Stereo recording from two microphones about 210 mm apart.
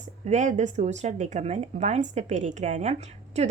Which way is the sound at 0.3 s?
35° right (ahead or behind).